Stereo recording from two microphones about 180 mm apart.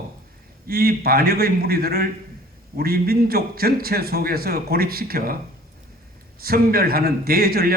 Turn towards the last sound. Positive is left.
turn(degrees=-55)  # may be behind; listen again after turning